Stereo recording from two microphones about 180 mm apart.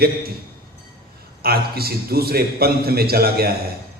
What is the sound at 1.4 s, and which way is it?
A man's voice, 60° right (ahead or behind).